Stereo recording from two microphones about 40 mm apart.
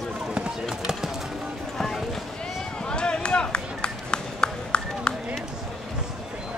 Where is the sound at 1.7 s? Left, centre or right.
Centre.